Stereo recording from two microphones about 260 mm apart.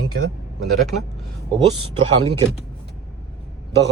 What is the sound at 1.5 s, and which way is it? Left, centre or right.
Speech, centre.